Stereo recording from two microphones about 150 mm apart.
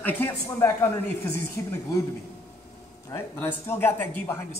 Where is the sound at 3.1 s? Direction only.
15° left (ahead or behind).